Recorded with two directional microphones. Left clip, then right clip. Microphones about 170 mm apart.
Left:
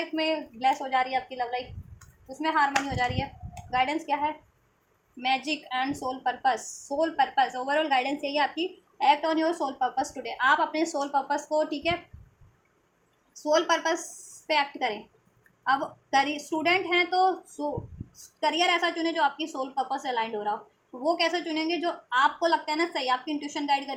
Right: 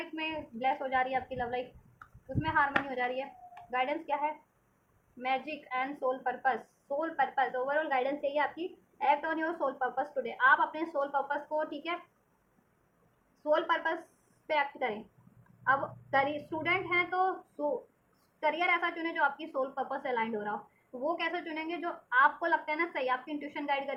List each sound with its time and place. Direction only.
0.2 s a woman's voice: 30° left (ahead or behind)
13.5 s a woman's voice: 35° left (ahead or behind)
18.3 s a woman's voice: 30° left (ahead or behind)